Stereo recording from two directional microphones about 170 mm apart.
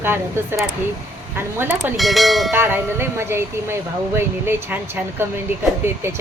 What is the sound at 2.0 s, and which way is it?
Speech, centre (ahead or behind).